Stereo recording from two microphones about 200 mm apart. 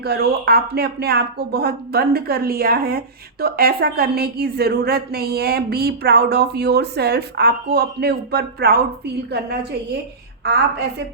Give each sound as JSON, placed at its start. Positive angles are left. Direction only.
{"t": 0.0, "sound": "a woman's voice", "side_deg": -55}